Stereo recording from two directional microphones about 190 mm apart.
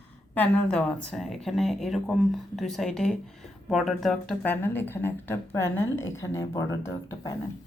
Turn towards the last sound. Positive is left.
turn(degrees=15)  # may be behind; listen again after turning